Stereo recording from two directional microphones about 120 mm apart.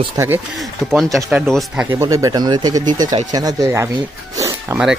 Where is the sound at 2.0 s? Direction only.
30° right (ahead or behind).